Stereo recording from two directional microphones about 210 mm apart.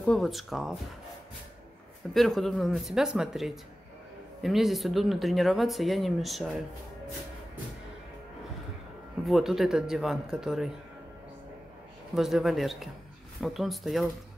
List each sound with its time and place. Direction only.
0.0 s speech: centre (ahead or behind)
2.1 s speech: centre (ahead or behind)
9.2 s speech: centre (ahead or behind)
12.1 s speech: centre (ahead or behind)